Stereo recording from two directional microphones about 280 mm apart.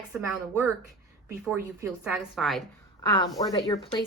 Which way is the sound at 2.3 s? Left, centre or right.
Centre.